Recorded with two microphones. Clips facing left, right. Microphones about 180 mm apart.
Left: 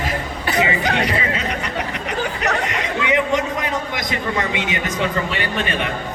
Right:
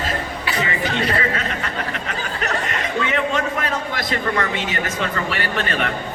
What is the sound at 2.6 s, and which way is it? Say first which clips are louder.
A man's voice: left 2 dB; 15° left (ahead or behind).